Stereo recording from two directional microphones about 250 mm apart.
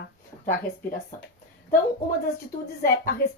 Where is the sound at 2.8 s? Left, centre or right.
Left.